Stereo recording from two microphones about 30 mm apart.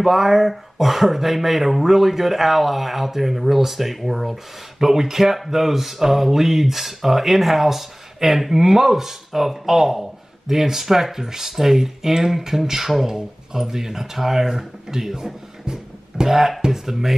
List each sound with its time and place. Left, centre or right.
0.0 s speech: centre; by 16.3 s right
16.3 s speech: centre